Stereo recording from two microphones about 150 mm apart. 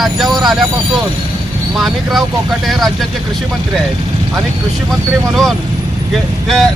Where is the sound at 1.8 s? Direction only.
Centre (ahead or behind).